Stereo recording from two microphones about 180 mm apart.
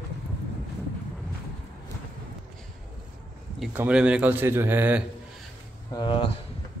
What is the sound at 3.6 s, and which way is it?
A man's voice, 5° right (ahead or behind).